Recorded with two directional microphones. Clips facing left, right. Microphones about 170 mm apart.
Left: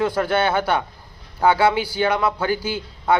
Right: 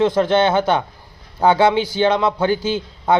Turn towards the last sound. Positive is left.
turn(degrees=-25)  # may be behind; listen again after turning